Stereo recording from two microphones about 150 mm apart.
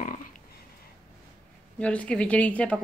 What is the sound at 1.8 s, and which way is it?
A woman's voice, 10° left (ahead or behind).